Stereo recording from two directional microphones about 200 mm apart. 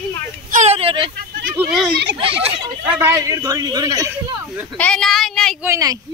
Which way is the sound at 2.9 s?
15° right (ahead or behind).